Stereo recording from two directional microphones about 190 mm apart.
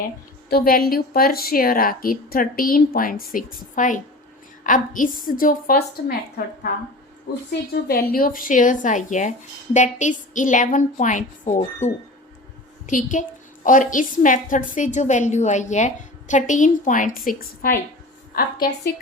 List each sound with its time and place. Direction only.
0.5 s a woman's voice: 50° left (ahead or behind)
7.7 s a woman's voice: 55° left (ahead or behind)